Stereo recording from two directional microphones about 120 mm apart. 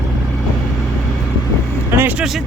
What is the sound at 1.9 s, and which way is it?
Vehicle, 15° right (ahead or behind).